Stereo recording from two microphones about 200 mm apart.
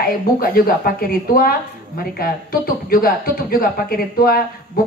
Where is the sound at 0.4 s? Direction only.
50° left (ahead or behind).